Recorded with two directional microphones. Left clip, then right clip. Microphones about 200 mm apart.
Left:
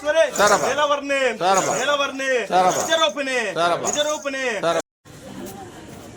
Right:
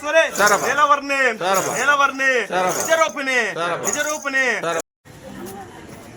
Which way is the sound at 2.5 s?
15° left (ahead or behind).